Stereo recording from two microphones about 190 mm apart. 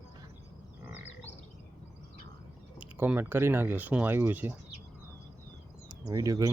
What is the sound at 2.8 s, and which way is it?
Speech, 10° right (ahead or behind).